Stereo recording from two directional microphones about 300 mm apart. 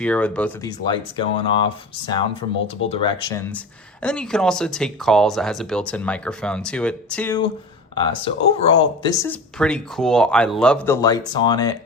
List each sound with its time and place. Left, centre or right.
0.0 s speech: centre
0.9 s speech: centre
2.9 s speech: centre